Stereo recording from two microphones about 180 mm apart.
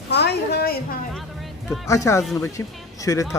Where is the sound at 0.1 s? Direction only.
65° left (ahead or behind).